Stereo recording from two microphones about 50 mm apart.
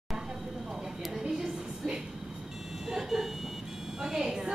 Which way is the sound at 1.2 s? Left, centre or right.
Centre.